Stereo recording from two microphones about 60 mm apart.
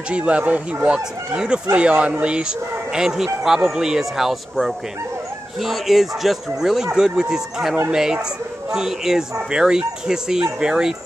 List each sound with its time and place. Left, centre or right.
0.1 s speech: centre
0.8 s speech: centre